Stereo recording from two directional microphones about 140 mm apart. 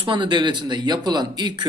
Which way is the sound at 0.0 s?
35° right (ahead or behind).